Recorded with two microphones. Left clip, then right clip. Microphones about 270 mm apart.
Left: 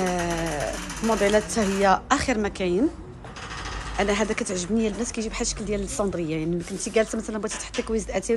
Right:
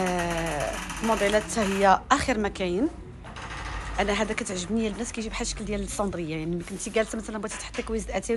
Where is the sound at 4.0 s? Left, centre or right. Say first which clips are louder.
Left 2 dB; centre.